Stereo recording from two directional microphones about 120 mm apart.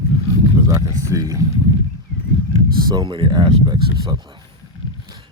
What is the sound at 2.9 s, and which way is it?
Speech, 40° right (ahead or behind).